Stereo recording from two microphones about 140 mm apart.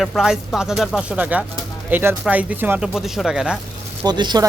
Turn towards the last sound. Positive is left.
turn(degrees=-30)  # may be behind; listen again after turning